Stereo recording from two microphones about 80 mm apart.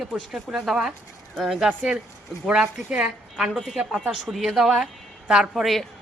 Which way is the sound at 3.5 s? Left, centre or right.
Centre.